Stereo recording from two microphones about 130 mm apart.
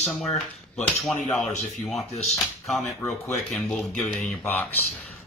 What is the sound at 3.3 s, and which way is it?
Speech, 5° left (ahead or behind).